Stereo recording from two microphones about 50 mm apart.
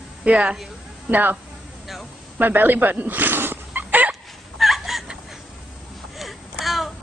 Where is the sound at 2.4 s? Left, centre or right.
Right.